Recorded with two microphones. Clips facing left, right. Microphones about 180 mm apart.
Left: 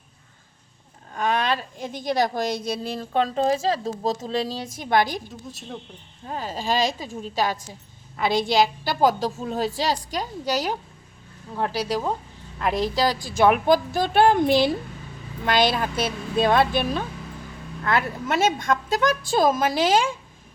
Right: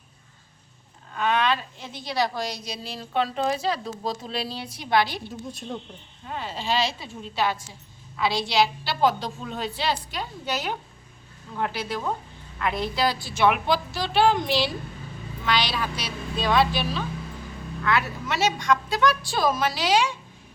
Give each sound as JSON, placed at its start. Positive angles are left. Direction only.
{"t": 1.1, "sound": "speech", "side_deg": 40}
{"t": 5.5, "sound": "speech", "side_deg": 5}
{"t": 6.2, "sound": "a woman's voice", "side_deg": 40}